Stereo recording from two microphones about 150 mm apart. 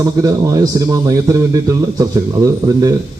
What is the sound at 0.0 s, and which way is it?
A man's voice, 25° right (ahead or behind).